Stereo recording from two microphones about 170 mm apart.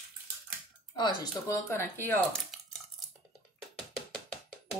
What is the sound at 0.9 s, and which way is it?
Speech, 20° left (ahead or behind).